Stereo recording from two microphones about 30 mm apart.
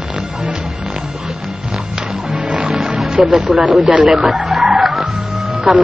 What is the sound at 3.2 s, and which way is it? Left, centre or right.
Speech, centre.